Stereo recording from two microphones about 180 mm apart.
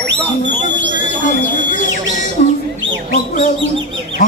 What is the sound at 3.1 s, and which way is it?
Bird, 45° left (ahead or behind).